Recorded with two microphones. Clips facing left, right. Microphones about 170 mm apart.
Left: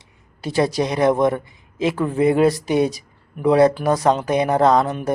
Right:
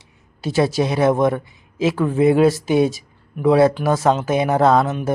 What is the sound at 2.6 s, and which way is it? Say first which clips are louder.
Speech: right 2 dB; 25° right (ahead or behind).